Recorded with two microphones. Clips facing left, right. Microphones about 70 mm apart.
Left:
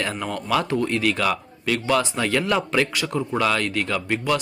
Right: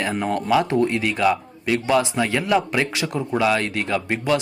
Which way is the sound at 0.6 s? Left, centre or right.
Right.